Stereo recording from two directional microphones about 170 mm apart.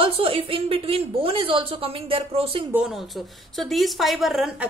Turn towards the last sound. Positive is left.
turn(degrees=0)  # may be behind; listen again after turning